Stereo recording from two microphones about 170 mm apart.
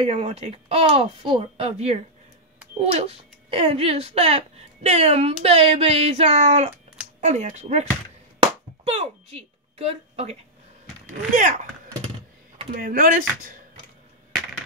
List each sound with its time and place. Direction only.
0.0 s speech: 35° right (ahead or behind)
8.4 s a sound: 35° right (ahead or behind)
11.1 s speech: 50° right (ahead or behind)
12.7 s speech: 55° right (ahead or behind)